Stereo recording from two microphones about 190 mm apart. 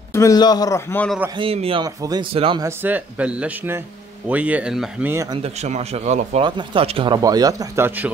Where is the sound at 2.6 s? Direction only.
10° right (ahead or behind).